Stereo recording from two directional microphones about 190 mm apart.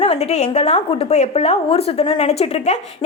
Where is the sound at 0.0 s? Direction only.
35° left (ahead or behind).